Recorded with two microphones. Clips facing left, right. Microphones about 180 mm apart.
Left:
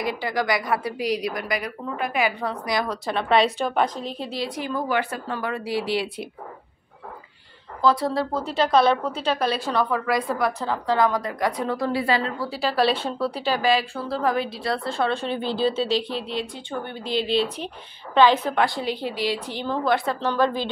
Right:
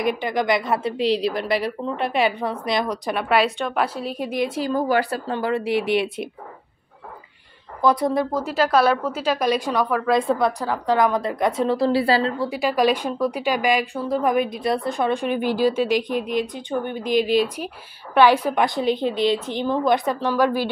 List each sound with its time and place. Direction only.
0.0 s a woman's voice: 20° right (ahead or behind)
4.6 s a woman's voice: 40° right (ahead or behind); by 6.2 s 20° right (ahead or behind)
7.8 s a woman's voice: 20° right (ahead or behind)
8.4 s a woman's voice: 5° right (ahead or behind)
10.1 s a woman's voice: 25° right (ahead or behind)
10.6 s a woman's voice: 15° right (ahead or behind); by 12.4 s 30° right (ahead or behind)
12.4 s a woman's voice: 15° right (ahead or behind)